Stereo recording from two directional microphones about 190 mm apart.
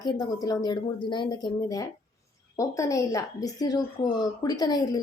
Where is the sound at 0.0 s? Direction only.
20° left (ahead or behind).